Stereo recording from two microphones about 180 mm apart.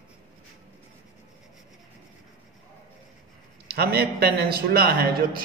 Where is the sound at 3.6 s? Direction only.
60° right (ahead or behind).